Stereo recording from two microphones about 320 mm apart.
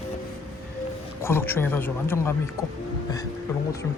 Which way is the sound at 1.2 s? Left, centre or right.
Centre.